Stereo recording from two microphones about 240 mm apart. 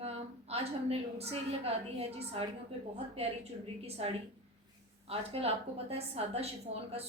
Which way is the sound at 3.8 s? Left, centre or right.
Right.